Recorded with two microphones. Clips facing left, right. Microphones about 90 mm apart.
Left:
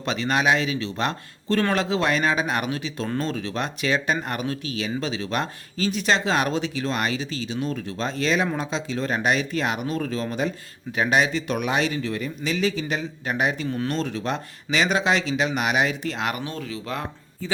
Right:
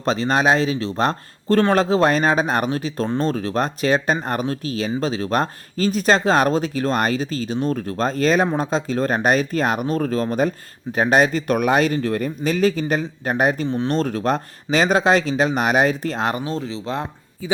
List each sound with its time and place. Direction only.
0.0 s speech: 35° right (ahead or behind)
13.7 s speech: 30° right (ahead or behind)
13.9 s speech: 45° right (ahead or behind); by 17.1 s 25° right (ahead or behind)